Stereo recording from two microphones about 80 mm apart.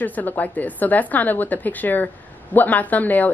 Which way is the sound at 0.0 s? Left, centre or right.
Left.